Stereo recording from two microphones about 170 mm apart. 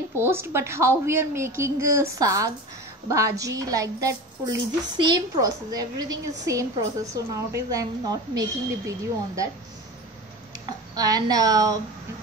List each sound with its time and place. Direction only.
0.1 s a woman's voice: 15° right (ahead or behind)
10.5 s speech: 20° right (ahead or behind)